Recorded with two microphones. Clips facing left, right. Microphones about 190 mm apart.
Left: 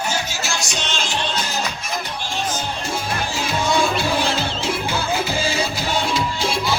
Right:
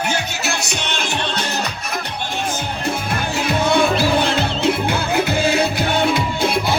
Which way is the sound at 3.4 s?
60° right (ahead or behind).